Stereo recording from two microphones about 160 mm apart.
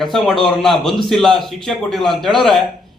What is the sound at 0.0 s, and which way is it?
A man's voice, centre (ahead or behind).